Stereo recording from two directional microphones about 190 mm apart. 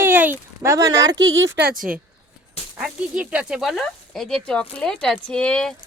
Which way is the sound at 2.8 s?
5° right (ahead or behind).